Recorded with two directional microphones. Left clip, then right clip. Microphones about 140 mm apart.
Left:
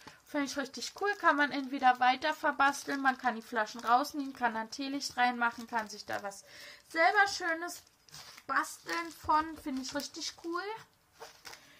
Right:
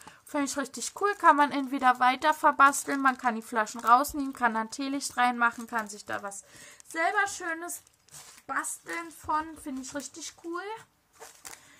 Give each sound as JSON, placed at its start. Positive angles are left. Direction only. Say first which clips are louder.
{"t": 0.3, "sound": "a woman's voice", "louder": "right 4 dB", "side_deg": -40}